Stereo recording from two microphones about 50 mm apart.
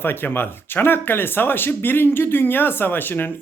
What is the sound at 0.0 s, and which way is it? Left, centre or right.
Speech, left.